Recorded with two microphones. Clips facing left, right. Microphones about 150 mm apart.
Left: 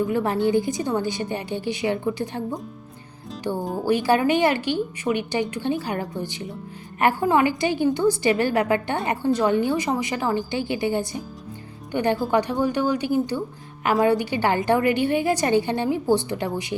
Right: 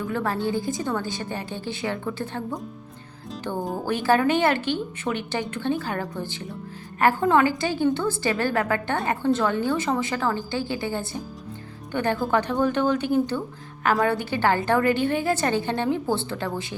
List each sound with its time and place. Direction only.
0.0 s a woman's voice: 15° left (ahead or behind)
3.6 s speech: centre (ahead or behind)
4.0 s a woman's voice: 15° left (ahead or behind)